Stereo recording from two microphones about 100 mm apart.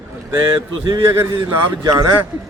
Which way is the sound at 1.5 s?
35° right (ahead or behind).